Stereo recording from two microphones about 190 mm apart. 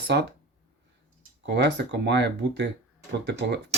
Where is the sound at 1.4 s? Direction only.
65° right (ahead or behind).